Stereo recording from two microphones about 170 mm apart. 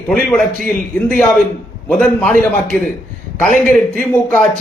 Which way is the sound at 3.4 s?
50° left (ahead or behind).